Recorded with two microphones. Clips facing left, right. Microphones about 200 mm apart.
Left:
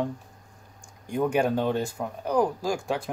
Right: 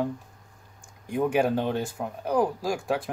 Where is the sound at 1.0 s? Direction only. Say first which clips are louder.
Even; 5° right (ahead or behind).